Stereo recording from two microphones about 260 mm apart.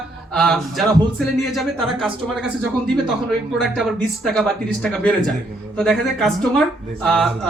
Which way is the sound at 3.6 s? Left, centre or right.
Centre.